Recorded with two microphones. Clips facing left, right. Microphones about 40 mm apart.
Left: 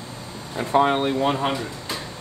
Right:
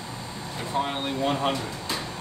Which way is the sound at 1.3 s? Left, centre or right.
Centre.